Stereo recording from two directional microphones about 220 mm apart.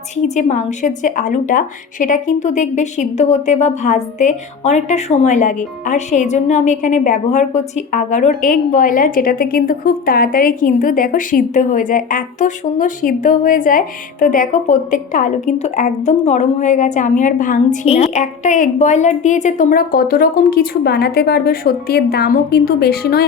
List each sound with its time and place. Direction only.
0.3 s a woman's voice: 35° left (ahead or behind)